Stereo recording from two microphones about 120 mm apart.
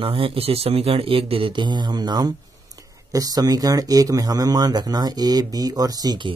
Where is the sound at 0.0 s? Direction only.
50° right (ahead or behind).